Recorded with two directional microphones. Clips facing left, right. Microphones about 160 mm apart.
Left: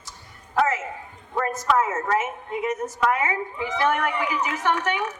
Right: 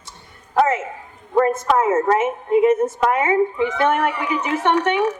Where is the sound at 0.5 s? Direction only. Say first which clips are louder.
Right 5 dB; 30° right (ahead or behind).